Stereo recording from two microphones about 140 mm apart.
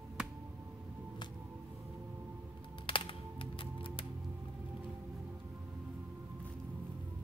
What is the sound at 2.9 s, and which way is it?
Music, 40° left (ahead or behind).